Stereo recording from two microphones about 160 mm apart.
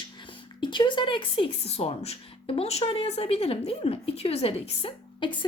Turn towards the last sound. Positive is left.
turn(degrees=30)  # may be behind; listen again after turning